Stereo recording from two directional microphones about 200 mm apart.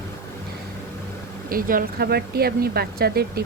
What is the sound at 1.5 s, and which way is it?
Speech, 45° right (ahead or behind).